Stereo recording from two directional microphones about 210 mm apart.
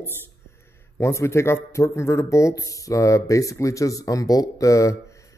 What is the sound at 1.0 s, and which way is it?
Speech, 15° left (ahead or behind).